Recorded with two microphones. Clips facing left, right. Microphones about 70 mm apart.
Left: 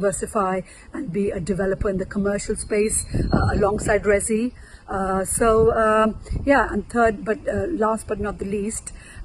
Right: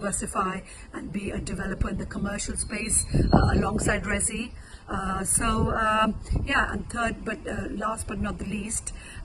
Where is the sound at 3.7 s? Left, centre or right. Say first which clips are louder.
Left 8 dB; left.